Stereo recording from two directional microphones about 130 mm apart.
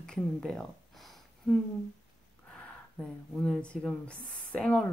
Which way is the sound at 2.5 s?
5° left (ahead or behind).